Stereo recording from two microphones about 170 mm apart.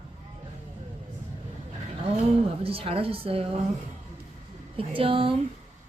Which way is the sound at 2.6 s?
35° right (ahead or behind).